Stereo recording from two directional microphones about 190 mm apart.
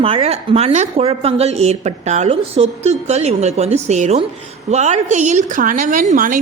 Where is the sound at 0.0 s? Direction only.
30° right (ahead or behind).